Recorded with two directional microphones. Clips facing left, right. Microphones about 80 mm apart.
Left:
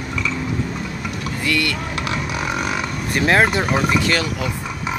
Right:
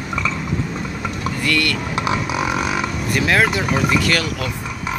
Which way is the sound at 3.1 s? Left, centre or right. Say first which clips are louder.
Left 2 dB; left.